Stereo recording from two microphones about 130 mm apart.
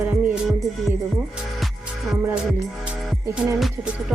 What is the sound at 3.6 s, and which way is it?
Music, 5° right (ahead or behind).